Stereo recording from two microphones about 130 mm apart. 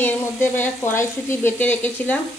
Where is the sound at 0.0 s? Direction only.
15° left (ahead or behind).